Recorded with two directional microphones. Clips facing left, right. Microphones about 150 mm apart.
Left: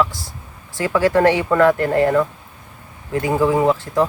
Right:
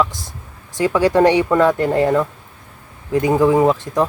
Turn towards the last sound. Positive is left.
turn(degrees=-20)  # may be behind; listen again after turning